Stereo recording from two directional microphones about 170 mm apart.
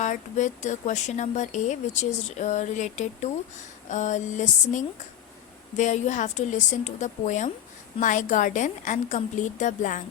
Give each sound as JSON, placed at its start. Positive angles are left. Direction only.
{"t": 0.0, "sound": "speech", "side_deg": 45}